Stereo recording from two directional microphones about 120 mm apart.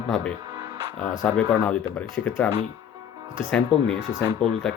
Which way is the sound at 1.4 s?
10° left (ahead or behind).